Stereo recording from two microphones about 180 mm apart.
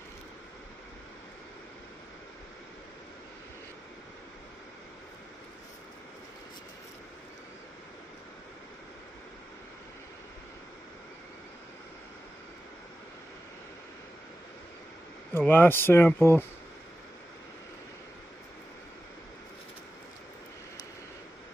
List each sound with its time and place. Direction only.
15.3 s speech: 10° left (ahead or behind)